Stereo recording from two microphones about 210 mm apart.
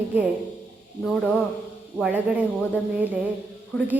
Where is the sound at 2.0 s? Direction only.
5° right (ahead or behind).